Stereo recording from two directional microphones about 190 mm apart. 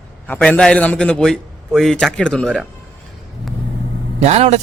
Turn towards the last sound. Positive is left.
turn(degrees=-35)  # may be behind; listen again after turning